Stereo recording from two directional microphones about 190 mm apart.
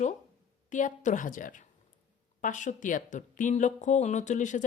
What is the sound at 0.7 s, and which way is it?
A woman's voice, 40° left (ahead or behind).